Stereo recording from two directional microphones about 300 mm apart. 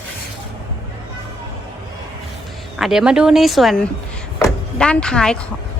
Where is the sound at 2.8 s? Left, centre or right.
Centre.